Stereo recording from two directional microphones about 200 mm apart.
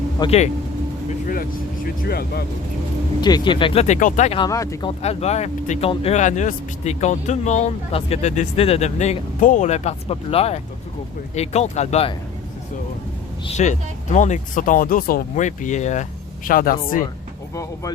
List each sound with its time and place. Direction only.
0.2 s speech: 30° left (ahead or behind)
1.3 s speech: 45° left (ahead or behind)
3.2 s speech: 20° left (ahead or behind); by 4.4 s 35° left (ahead or behind)
4.4 s speech: 15° left (ahead or behind)
4.9 s speech: 30° left (ahead or behind)
13.5 s speech: 35° left (ahead or behind)
17.5 s speech: 15° left (ahead or behind)